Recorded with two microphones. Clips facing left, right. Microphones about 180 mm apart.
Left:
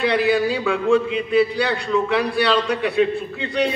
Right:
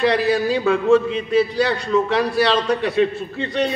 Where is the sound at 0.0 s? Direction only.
40° right (ahead or behind).